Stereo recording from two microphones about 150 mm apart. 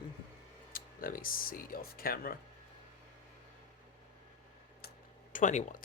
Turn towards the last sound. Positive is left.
turn(degrees=55)  # may be behind; listen again after turning